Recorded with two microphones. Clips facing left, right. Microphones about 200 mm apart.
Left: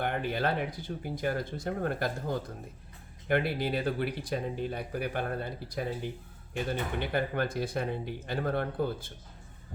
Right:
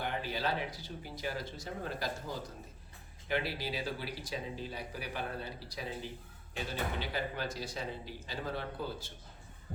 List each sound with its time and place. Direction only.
0.0 s speech: 55° left (ahead or behind)